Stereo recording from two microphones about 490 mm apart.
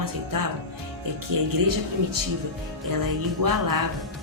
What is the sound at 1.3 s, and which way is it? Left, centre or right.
Speech, right.